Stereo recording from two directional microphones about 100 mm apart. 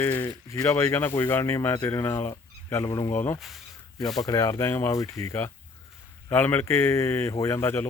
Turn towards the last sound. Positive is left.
turn(degrees=25)  # may be behind; listen again after turning